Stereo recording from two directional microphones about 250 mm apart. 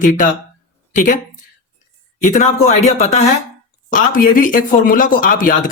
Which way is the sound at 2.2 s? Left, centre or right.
Left.